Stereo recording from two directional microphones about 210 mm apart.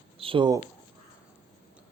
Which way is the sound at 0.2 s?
25° right (ahead or behind).